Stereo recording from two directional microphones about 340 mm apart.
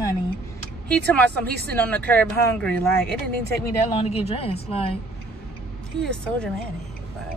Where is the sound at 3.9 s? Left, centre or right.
Centre.